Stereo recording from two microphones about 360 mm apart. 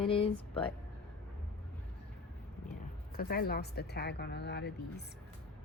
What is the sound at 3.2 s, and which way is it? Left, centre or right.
A woman's voice, left.